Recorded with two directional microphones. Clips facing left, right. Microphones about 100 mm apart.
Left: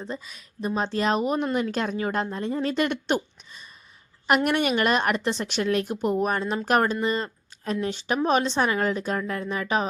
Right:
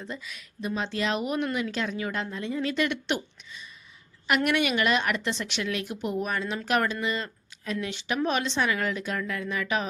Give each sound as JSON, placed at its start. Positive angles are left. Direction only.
{"t": 0.0, "sound": "speech", "side_deg": 35}